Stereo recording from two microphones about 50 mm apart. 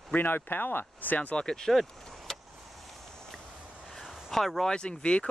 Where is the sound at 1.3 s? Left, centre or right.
Centre.